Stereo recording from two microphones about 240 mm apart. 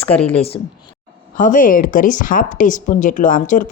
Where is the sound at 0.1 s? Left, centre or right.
Centre.